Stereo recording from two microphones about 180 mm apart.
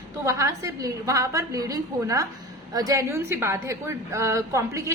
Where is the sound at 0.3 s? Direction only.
15° right (ahead or behind).